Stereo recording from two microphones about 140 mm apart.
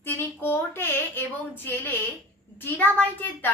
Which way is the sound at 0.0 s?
15° left (ahead or behind).